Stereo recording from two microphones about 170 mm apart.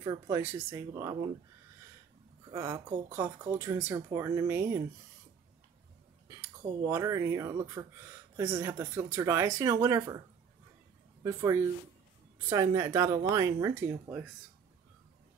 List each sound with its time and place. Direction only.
0.0 s speech: 20° right (ahead or behind)
2.5 s speech: 20° right (ahead or behind)
6.2 s speech: 15° right (ahead or behind)
11.2 s speech: 15° right (ahead or behind)